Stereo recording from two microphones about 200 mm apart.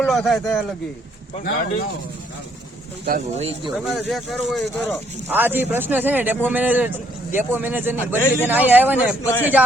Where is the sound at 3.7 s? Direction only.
Centre (ahead or behind).